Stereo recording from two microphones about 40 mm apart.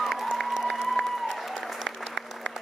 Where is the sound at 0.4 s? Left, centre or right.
Centre.